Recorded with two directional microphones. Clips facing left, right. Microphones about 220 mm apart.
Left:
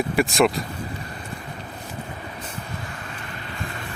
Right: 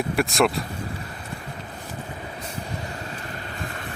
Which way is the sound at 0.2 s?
Centre (ahead or behind).